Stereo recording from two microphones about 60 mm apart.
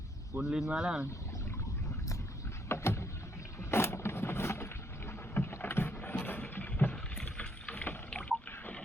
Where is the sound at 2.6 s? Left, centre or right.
Left.